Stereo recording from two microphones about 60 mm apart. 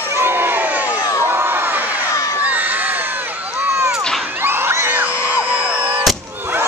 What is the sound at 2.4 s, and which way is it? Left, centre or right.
Crowd, right.